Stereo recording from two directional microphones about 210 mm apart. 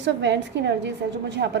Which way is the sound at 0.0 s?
60° right (ahead or behind).